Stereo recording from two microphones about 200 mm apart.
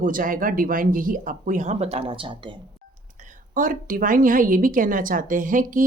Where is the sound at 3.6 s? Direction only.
40° right (ahead or behind).